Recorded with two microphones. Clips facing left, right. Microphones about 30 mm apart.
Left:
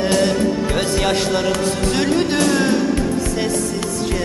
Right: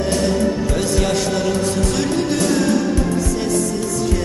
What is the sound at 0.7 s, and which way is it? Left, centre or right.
Speech, left.